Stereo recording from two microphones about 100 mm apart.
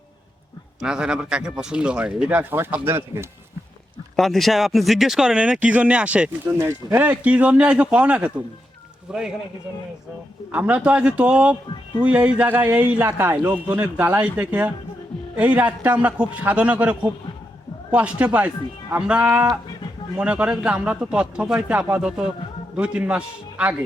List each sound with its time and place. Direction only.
0.8 s speech: 10° right (ahead or behind)
4.2 s speech: centre (ahead or behind)
6.5 s speech: 25° right (ahead or behind); by 9.4 s 5° right (ahead or behind)
10.5 s speech: 15° right (ahead or behind)